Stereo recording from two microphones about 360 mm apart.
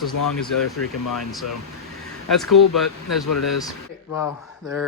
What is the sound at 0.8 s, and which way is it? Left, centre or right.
Speech, left.